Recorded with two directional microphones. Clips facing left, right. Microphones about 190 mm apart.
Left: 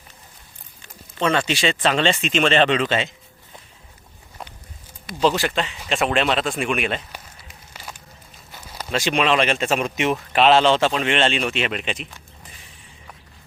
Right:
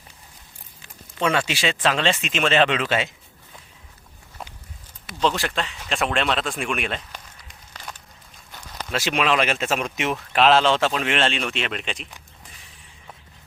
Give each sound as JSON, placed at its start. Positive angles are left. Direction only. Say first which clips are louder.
{"t": 0.8, "sound": "speech", "louder": "left 1 dB", "side_deg": -5}
{"t": 5.0, "sound": "speech", "louder": "left 3 dB", "side_deg": 5}
{"t": 8.5, "sound": "a sound", "louder": "left 2 dB", "side_deg": 5}
{"t": 9.0, "sound": "speech", "louder": "left 2 dB", "side_deg": -5}